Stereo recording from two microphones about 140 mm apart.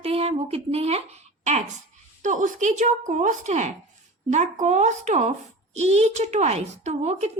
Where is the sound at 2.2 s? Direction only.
65° right (ahead or behind).